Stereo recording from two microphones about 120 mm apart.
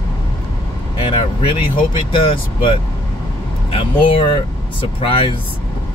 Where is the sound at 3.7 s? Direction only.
45° left (ahead or behind).